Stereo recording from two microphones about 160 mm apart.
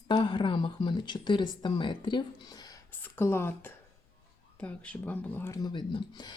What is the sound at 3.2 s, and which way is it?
Speech, 15° left (ahead or behind).